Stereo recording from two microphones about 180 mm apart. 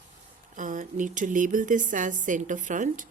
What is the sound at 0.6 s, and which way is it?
A woman's voice, 45° right (ahead or behind).